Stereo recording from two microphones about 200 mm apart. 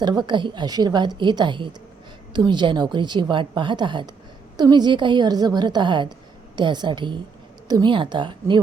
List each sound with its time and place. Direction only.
0.0 s a woman's voice: 20° right (ahead or behind)